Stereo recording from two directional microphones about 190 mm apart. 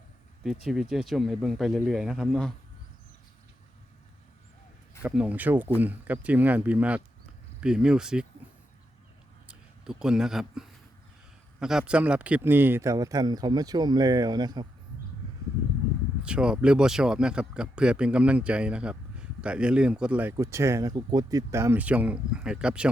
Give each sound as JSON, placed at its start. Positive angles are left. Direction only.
{"t": 0.4, "sound": "speech", "side_deg": 0}
{"t": 5.0, "sound": "speech", "side_deg": -5}
{"t": 9.5, "sound": "speech", "side_deg": -5}
{"t": 16.2, "sound": "speech", "side_deg": -5}